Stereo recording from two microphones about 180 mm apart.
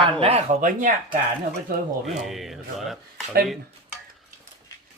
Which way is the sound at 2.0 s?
Centre (ahead or behind).